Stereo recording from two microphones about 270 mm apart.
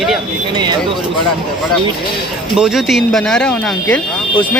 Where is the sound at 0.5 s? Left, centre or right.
Centre.